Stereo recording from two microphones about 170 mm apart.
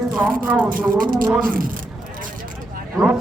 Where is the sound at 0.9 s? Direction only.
55° right (ahead or behind).